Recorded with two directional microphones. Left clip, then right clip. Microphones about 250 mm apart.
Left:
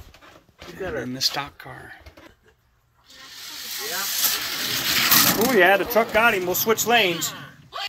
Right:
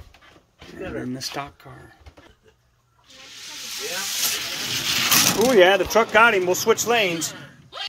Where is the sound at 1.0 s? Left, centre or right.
Centre.